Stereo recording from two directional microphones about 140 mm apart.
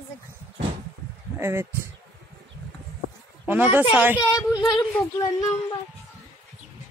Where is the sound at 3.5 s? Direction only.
15° right (ahead or behind).